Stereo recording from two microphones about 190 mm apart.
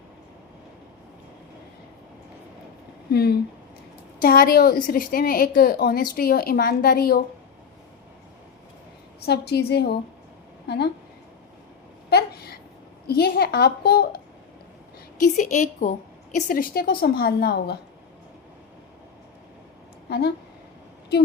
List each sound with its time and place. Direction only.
3.1 s a woman's voice: 55° left (ahead or behind)
9.2 s a woman's voice: 60° left (ahead or behind)
12.1 s a sound: 55° left (ahead or behind)
13.1 s a woman's voice: 50° left (ahead or behind)
15.2 s a woman's voice: 40° left (ahead or behind); by 17.7 s 60° left (ahead or behind)
20.1 s speech: 60° left (ahead or behind)